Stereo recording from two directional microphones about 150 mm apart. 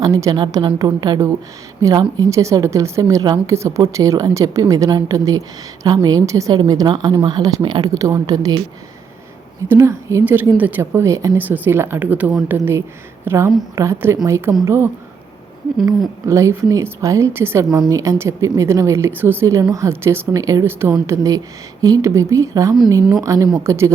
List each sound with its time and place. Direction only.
0.0 s a woman's voice: 25° right (ahead or behind)
9.6 s a woman's voice: 20° right (ahead or behind)
16.2 s a woman's voice: 20° right (ahead or behind)